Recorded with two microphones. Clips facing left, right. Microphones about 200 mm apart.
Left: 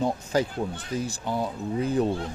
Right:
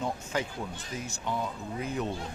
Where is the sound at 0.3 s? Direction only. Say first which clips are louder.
Left 8 dB; 35° left (ahead or behind).